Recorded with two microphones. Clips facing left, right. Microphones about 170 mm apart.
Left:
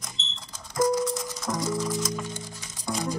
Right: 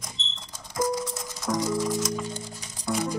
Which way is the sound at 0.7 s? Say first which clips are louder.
Left 4 dB; 5° right (ahead or behind).